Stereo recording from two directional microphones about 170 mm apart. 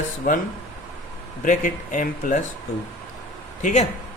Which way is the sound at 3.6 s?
45° left (ahead or behind).